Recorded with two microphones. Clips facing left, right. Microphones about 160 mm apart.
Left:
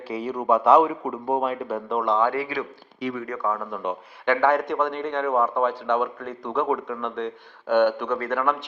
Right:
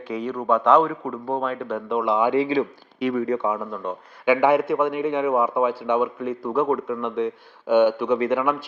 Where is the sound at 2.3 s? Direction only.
20° right (ahead or behind).